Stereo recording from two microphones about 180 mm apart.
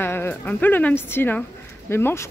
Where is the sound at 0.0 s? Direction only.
10° left (ahead or behind).